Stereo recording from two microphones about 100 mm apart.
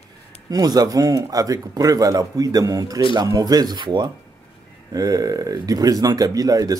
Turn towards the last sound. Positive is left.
turn(degrees=-40)  # may be behind; listen again after turning